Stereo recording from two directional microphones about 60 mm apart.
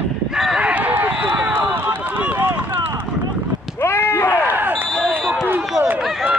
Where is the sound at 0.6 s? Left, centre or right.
Right.